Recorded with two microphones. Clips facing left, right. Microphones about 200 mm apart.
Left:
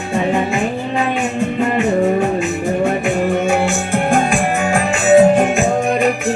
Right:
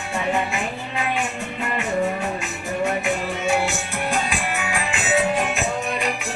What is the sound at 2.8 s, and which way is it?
Music, 50° left (ahead or behind).